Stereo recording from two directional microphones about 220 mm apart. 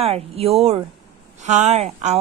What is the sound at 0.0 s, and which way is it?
Speech, 25° right (ahead or behind).